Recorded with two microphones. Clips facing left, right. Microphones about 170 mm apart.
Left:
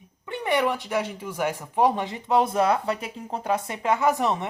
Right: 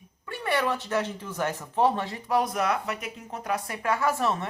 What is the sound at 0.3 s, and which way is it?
Speech, 20° left (ahead or behind).